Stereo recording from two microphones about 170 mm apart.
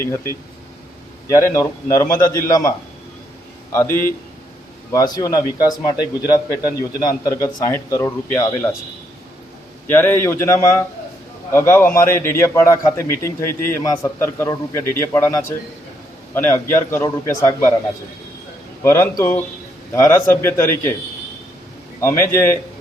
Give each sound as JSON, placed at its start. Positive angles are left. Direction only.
{"t": 1.3, "sound": "a man's voice", "side_deg": 15}
{"t": 9.8, "sound": "a man's voice", "side_deg": 15}
{"t": 18.8, "sound": "a man's voice", "side_deg": 15}
{"t": 22.0, "sound": "a man's voice", "side_deg": 15}